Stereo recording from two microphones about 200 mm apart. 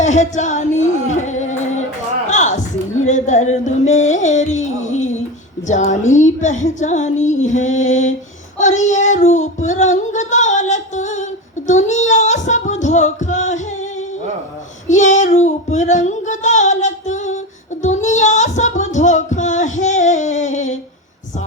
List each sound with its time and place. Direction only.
0.0 s music: 35° left (ahead or behind)
1.3 s singing: 35° left (ahead or behind)
2.3 s a sound: 35° left (ahead or behind)
3.1 s music: 35° left (ahead or behind)
8.5 s child singing: 35° left (ahead or behind)
14.8 s child singing: 35° left (ahead or behind)
17.8 s music: 35° left (ahead or behind)